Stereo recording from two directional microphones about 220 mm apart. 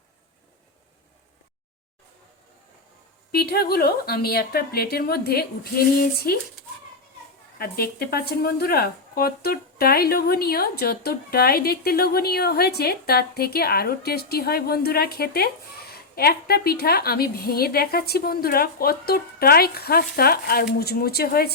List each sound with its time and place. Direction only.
3.3 s speech: 45° left (ahead or behind)
7.6 s speech: 45° left (ahead or behind)